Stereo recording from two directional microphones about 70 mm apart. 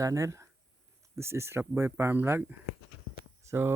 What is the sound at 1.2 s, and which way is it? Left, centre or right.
Speech, right.